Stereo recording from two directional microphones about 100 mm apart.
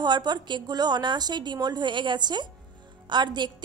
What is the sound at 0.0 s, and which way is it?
A woman's voice, 45° right (ahead or behind).